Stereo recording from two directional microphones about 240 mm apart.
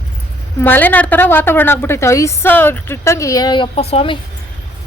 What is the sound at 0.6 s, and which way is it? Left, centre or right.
A woman's voice, centre.